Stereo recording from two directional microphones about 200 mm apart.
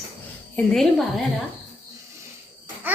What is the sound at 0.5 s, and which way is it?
Speech, centre (ahead or behind).